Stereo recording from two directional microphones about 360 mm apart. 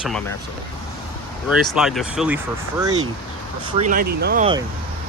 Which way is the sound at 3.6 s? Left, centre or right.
Centre.